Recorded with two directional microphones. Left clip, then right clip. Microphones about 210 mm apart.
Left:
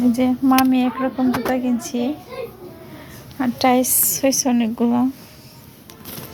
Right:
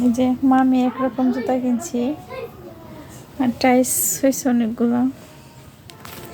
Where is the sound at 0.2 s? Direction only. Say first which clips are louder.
Even; centre (ahead or behind).